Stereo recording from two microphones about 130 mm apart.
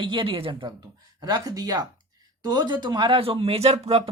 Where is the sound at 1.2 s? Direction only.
30° right (ahead or behind).